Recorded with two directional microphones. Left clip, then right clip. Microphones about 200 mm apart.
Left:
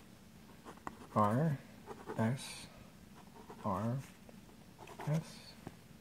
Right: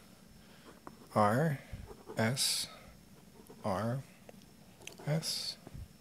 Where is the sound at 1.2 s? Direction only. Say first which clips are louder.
Right 4 dB; 25° right (ahead or behind).